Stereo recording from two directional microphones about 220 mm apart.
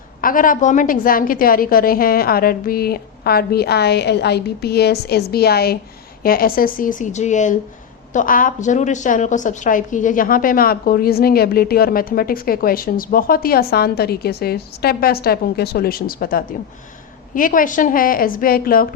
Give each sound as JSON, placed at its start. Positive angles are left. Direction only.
{"t": 0.2, "sound": "a woman's voice", "side_deg": 40}